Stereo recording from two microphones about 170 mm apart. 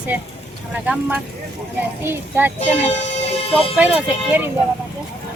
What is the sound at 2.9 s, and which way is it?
Music, 40° left (ahead or behind).